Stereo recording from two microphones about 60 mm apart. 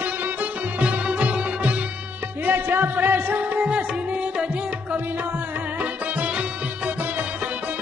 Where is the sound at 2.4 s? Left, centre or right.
Right.